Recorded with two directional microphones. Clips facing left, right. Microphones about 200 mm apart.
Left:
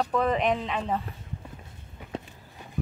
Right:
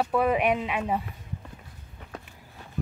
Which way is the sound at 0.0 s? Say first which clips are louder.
Right 1 dB; 10° right (ahead or behind).